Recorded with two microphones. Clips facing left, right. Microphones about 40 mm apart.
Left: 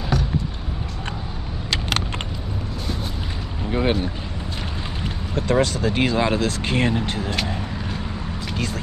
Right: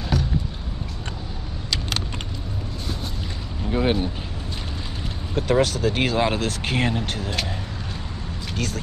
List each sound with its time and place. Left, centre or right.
0.1 s a sound: centre
1.7 s vehicle: left
3.7 s speech: centre
5.3 s speech: centre